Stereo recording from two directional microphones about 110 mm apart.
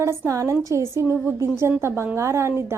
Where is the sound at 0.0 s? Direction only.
30° right (ahead or behind).